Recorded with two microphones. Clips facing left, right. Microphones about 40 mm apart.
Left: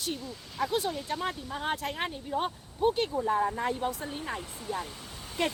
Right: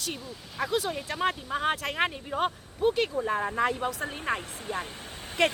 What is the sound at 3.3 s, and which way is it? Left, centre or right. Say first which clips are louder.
Speech: right 1 dB; right.